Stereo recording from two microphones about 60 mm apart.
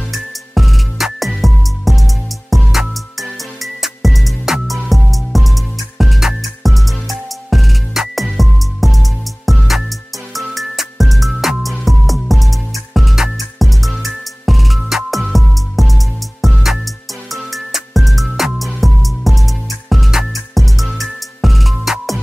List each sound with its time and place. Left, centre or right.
0.1 s music: centre